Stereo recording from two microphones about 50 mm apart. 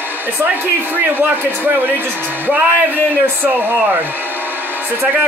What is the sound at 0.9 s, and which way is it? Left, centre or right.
Speech, right.